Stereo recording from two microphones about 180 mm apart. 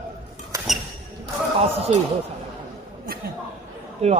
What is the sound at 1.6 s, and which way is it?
Speech, 35° right (ahead or behind).